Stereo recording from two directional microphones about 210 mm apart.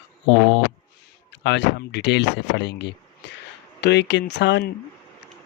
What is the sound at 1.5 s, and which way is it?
Speech, 55° left (ahead or behind).